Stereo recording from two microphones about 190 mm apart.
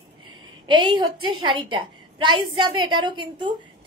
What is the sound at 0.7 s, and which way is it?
A woman's voice, 25° right (ahead or behind).